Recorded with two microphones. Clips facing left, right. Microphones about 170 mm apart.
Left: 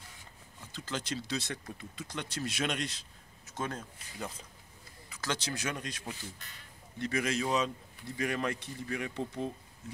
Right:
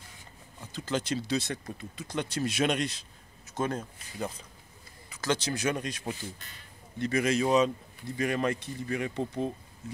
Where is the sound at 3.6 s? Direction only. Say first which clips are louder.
Right 6 dB; 20° right (ahead or behind).